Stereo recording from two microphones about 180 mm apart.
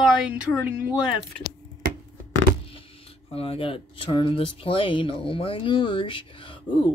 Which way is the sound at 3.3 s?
35° left (ahead or behind).